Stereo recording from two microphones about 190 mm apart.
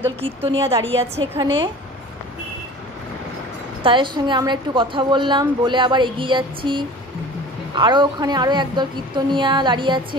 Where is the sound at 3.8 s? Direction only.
25° right (ahead or behind).